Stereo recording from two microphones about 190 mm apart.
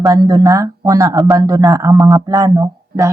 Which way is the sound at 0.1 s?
20° right (ahead or behind).